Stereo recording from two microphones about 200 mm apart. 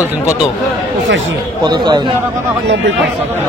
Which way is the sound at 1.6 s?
20° right (ahead or behind).